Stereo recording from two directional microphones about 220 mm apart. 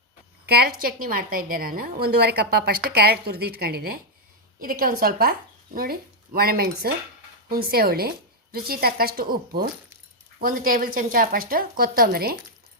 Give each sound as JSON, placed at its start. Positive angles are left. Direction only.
{"t": 0.4, "sound": "a woman's voice", "side_deg": -45}